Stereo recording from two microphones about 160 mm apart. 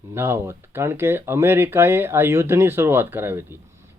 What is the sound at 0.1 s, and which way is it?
Speech, 15° right (ahead or behind).